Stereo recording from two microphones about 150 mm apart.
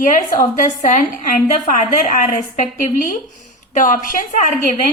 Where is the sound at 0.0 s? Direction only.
60° left (ahead or behind).